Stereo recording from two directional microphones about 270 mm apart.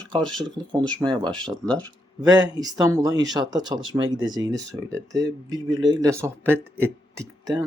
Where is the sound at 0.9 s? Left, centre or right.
Centre.